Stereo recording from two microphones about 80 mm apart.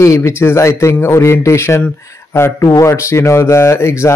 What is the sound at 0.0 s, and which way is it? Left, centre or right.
Speech, left.